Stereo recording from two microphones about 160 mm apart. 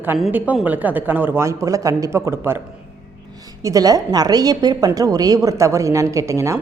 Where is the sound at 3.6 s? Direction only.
20° right (ahead or behind).